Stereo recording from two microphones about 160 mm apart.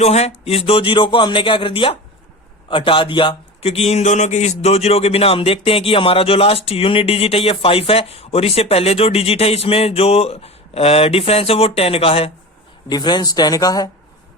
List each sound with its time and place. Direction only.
0.0 s a man's voice: 40° left (ahead or behind); by 13.9 s 25° left (ahead or behind)